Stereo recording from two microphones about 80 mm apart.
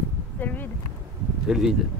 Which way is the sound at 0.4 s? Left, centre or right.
Left.